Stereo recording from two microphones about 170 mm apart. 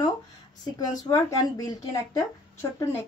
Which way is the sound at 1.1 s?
20° left (ahead or behind).